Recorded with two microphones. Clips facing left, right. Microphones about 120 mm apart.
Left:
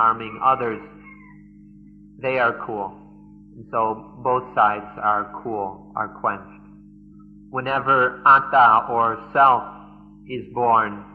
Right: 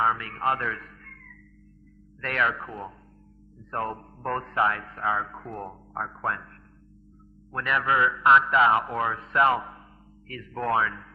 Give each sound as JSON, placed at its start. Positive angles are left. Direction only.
{"t": 0.0, "sound": "mantra", "side_deg": 40}
{"t": 2.2, "sound": "mantra", "side_deg": 40}
{"t": 7.5, "sound": "mantra", "side_deg": 40}